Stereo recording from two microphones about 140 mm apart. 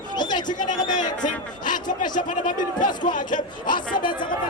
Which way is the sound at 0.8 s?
65° left (ahead or behind).